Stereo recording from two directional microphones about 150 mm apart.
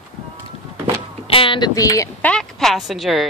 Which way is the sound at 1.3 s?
35° left (ahead or behind).